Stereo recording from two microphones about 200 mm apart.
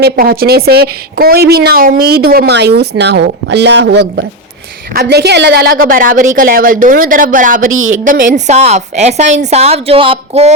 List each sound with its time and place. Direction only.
0.0 s a woman's voice: 50° right (ahead or behind); by 10.5 s 30° right (ahead or behind)